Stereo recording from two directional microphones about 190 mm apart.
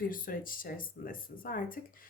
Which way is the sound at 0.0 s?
50° left (ahead or behind).